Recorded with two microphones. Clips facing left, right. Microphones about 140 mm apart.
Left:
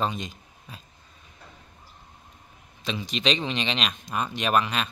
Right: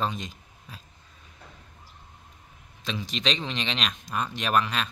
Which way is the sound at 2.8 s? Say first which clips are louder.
Left 3 dB; centre (ahead or behind).